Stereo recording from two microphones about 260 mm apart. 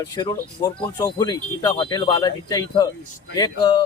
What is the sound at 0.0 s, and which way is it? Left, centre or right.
Speech, centre.